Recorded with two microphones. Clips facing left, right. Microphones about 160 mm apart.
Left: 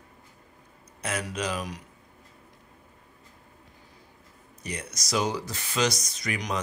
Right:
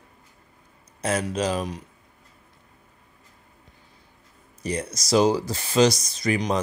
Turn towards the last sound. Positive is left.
turn(degrees=-30)  # may be behind; listen again after turning